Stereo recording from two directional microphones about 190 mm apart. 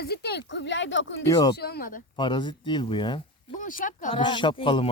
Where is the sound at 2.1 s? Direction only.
25° left (ahead or behind).